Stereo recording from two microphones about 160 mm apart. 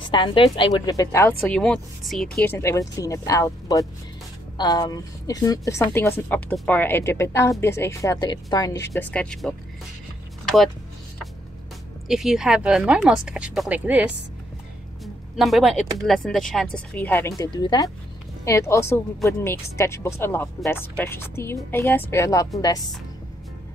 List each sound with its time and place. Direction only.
0.1 s a woman's voice: 30° left (ahead or behind); by 1.6 s 15° left (ahead or behind)
1.6 s speech: 5° left (ahead or behind)
2.5 s a woman's voice: 15° left (ahead or behind)
9.1 s speech: 5° left (ahead or behind)
10.4 s a sound: centre (ahead or behind)
12.1 s speech: 5° right (ahead or behind)
15.3 s a woman's voice: centre (ahead or behind); by 22.8 s 25° left (ahead or behind)